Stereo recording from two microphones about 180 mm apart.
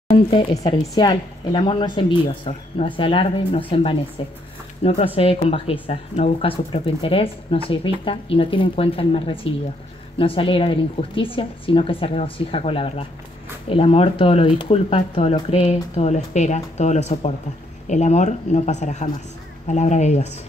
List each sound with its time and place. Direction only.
0.1 s a woman's voice: 30° left (ahead or behind)